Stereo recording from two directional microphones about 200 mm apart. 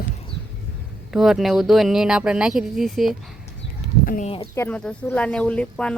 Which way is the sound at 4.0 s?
45° left (ahead or behind).